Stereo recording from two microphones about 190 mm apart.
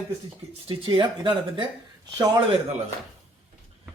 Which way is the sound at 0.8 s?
25° right (ahead or behind).